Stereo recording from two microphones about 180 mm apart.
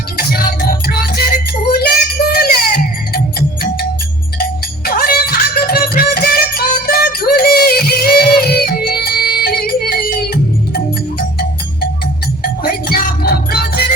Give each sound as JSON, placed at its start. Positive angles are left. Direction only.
{"t": 0.2, "sound": "music", "side_deg": 55}
{"t": 4.9, "sound": "music", "side_deg": 55}